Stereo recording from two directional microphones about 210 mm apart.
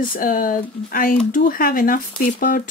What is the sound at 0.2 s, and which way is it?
Speech, 40° left (ahead or behind).